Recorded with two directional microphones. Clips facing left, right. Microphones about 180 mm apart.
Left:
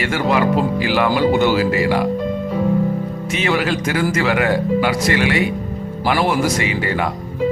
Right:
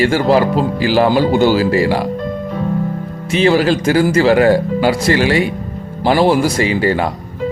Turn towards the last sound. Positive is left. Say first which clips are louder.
# right 5 dB
turn(degrees=-35)  # may be behind; listen again after turning